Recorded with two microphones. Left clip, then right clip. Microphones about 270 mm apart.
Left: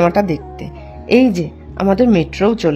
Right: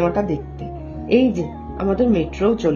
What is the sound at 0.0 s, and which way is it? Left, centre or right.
Speech, left.